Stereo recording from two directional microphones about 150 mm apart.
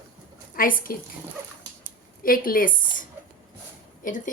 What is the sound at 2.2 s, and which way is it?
Speech, 70° left (ahead or behind).